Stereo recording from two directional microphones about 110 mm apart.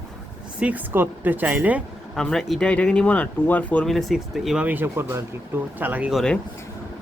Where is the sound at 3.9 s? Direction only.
Centre (ahead or behind); by 6.1 s 15° right (ahead or behind).